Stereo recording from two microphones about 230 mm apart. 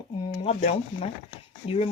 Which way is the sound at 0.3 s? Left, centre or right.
Left.